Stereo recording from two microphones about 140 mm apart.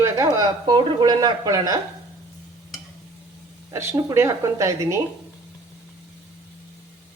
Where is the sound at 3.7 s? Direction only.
20° right (ahead or behind).